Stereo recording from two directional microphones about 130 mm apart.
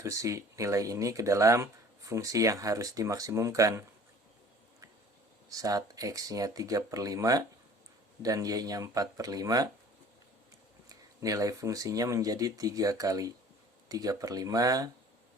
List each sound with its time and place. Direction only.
0.0 s speech: 25° right (ahead or behind)
5.5 s speech: 25° right (ahead or behind)
10.8 s speech: 25° right (ahead or behind)